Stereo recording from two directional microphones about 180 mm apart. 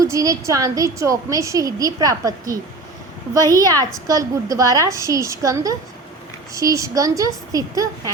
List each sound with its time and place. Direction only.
0.0 s a woman's voice: 20° right (ahead or behind)
3.5 s a woman's voice: 20° right (ahead or behind)